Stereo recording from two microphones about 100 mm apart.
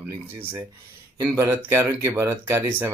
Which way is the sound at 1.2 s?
30° right (ahead or behind).